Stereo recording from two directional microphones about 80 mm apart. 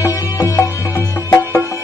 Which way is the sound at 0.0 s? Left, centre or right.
Left.